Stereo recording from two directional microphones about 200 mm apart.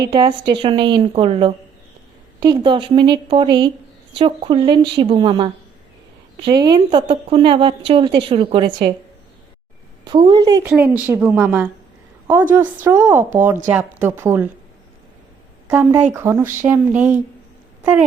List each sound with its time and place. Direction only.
0.0 s a woman's voice: 20° right (ahead or behind)
10.0 s a woman's voice: 25° right (ahead or behind)
10.6 s speech: 10° right (ahead or behind)
16.1 s speech: 10° right (ahead or behind)